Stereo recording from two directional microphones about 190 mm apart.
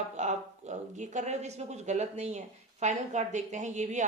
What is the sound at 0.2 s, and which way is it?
A woman's voice, 40° right (ahead or behind).